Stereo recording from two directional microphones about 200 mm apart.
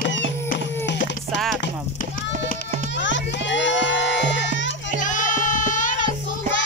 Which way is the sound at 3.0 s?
65° left (ahead or behind).